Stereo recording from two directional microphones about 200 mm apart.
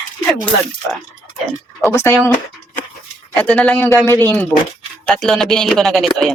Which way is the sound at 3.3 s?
5° left (ahead or behind).